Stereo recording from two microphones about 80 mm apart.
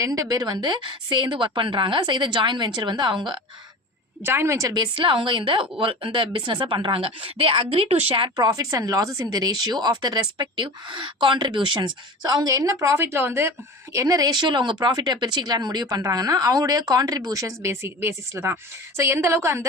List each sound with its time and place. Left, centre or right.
0.0 s a woman's voice: right
4.2 s a woman's voice: right
4.7 s speech: right
8.5 s a woman's voice: right
13.9 s speech: right
16.0 s a woman's voice: right